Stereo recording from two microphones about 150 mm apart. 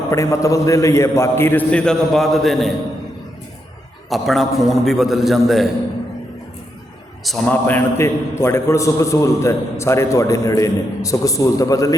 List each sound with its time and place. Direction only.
0.1 s a man's voice: 20° left (ahead or behind); by 2.6 s centre (ahead or behind)
4.1 s a man's voice: centre (ahead or behind)
7.4 s a man's voice: 10° left (ahead or behind)